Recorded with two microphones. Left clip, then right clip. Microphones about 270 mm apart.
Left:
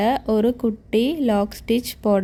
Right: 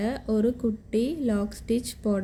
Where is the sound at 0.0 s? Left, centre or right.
Left.